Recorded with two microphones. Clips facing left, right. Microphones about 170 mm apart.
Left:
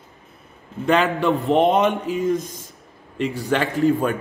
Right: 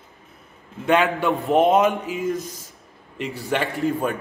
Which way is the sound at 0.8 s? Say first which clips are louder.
Left 1 dB; centre (ahead or behind).